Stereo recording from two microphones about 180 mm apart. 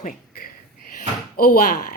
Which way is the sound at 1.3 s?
55° left (ahead or behind).